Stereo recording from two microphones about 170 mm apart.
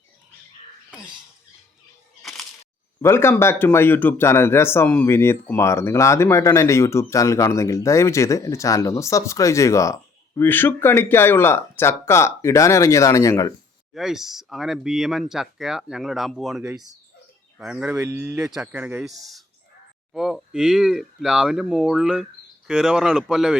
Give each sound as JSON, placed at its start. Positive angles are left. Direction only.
{"t": 2.2, "sound": "a sound", "side_deg": 0}
{"t": 3.0, "sound": "speech", "side_deg": 15}
{"t": 13.9, "sound": "speech", "side_deg": 0}
{"t": 19.0, "sound": "speech", "side_deg": 0}